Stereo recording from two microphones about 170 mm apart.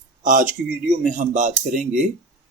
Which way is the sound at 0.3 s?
50° right (ahead or behind).